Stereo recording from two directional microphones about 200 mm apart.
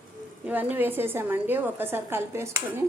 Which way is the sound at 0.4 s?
10° right (ahead or behind).